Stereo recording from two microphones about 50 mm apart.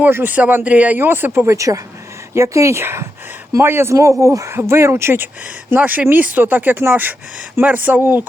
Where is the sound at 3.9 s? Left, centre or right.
Right.